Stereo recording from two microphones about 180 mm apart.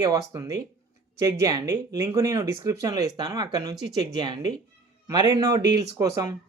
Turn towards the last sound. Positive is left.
turn(degrees=-20)  # may be behind; listen again after turning